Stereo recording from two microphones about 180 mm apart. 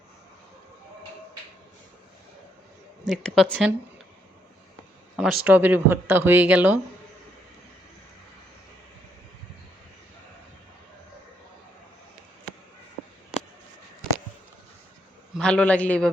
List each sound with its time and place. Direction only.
3.1 s speech: 5° left (ahead or behind)
5.1 s speech: 5° right (ahead or behind)
15.4 s a man's voice: 5° left (ahead or behind)